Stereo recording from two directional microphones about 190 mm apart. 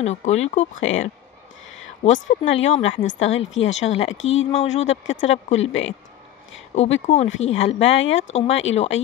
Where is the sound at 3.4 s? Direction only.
85° left.